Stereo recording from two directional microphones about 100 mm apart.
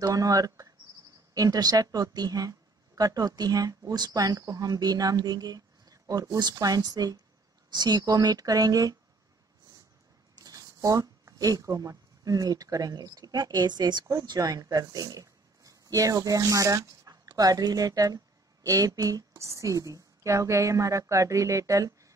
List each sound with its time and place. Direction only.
0.0 s speech: 35° right (ahead or behind)
10.3 s speech: 40° right (ahead or behind)